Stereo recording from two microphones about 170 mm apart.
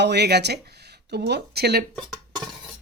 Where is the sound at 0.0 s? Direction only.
80° right.